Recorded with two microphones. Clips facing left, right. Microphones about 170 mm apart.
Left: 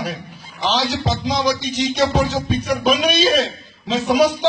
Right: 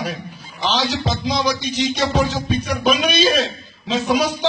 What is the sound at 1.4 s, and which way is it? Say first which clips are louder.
Music: left 1 dB; centre (ahead or behind).